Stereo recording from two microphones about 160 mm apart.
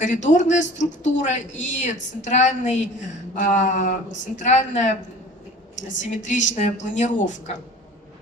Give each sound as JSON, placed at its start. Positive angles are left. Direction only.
{"t": 0.0, "sound": "speech", "side_deg": 50}
{"t": 6.0, "sound": "speech", "side_deg": 50}